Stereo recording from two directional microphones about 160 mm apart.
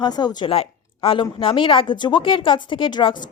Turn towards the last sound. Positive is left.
turn(degrees=30)  # may be behind; listen again after turning